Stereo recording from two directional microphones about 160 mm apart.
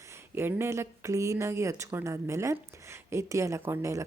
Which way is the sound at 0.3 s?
15° right (ahead or behind).